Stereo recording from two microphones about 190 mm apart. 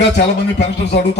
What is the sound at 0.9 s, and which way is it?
Speech, 60° left (ahead or behind).